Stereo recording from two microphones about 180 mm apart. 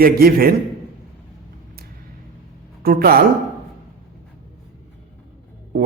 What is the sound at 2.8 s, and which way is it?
Speech, 55° right (ahead or behind).